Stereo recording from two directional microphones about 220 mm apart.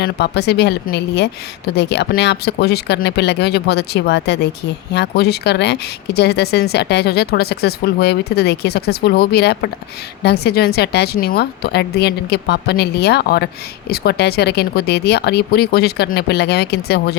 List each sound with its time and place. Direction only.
0.0 s speech: 50° left (ahead or behind)